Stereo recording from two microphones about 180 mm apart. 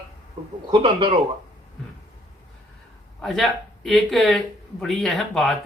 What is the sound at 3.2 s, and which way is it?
Speech, centre (ahead or behind).